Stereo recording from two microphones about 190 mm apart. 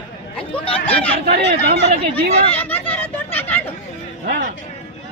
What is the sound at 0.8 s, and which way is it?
Chatter, 10° left (ahead or behind).